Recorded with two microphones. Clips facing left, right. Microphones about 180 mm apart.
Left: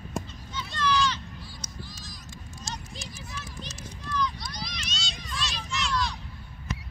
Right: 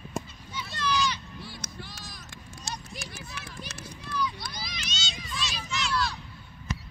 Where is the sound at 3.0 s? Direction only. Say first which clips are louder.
Even; 65° right (ahead or behind).